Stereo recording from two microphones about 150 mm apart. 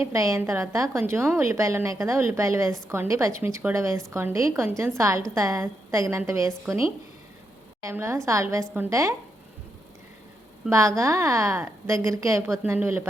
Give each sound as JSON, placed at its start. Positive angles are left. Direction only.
{"t": 0.0, "sound": "a woman's voice", "side_deg": -20}
{"t": 10.7, "sound": "a woman's voice", "side_deg": -20}